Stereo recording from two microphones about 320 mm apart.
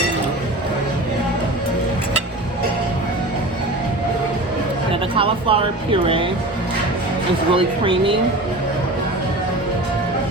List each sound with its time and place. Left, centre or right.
5.1 s speech: centre
7.5 s speech: centre